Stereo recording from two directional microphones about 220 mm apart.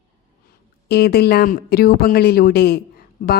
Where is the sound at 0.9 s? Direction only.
45° left (ahead or behind).